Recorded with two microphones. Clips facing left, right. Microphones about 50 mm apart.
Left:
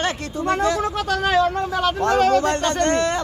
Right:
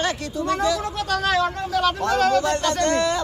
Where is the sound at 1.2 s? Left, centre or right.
Centre.